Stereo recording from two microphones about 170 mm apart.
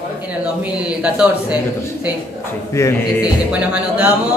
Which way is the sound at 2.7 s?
15° left (ahead or behind).